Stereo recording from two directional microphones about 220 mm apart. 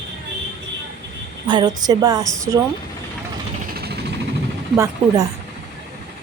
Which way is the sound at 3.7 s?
45° right (ahead or behind).